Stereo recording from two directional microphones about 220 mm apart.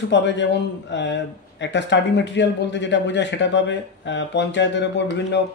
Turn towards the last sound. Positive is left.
turn(degrees=55)  # may be behind; listen again after turning